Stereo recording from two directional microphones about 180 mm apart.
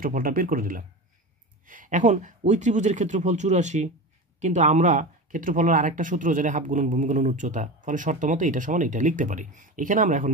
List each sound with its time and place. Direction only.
0.0 s speech: 50° right (ahead or behind)